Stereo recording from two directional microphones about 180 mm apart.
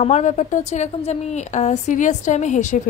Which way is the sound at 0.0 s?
40° left (ahead or behind).